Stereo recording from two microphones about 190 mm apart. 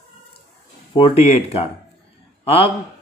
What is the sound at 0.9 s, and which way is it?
Speech, 30° left (ahead or behind).